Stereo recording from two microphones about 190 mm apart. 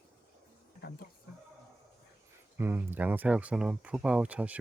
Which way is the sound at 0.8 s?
55° left (ahead or behind).